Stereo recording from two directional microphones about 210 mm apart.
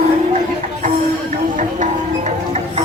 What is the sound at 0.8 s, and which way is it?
Music, 40° right (ahead or behind).